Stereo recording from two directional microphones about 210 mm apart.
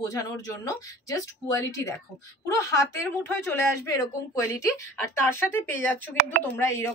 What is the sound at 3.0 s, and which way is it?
Speech, 10° left (ahead or behind).